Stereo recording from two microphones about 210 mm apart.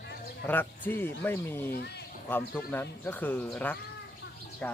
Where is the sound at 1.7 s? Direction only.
50° left (ahead or behind).